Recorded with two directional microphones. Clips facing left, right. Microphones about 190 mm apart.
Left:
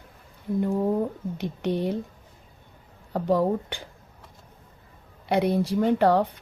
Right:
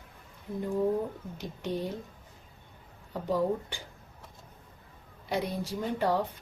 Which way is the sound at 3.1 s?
65° left (ahead or behind).